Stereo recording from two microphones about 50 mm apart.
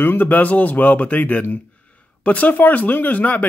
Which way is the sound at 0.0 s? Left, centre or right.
Left.